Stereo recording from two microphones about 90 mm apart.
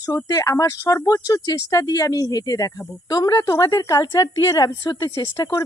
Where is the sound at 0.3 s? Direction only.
35° left (ahead or behind).